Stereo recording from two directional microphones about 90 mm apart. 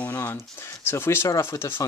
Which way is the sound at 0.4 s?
30° left (ahead or behind).